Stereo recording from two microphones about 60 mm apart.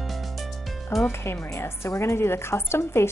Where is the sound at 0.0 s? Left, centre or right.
Centre.